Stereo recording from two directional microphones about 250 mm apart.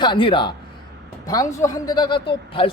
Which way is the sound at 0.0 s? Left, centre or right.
Centre.